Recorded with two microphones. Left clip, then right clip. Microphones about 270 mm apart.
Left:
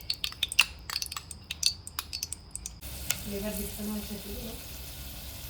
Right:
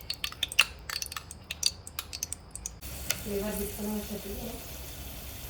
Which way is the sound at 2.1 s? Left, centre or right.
Centre.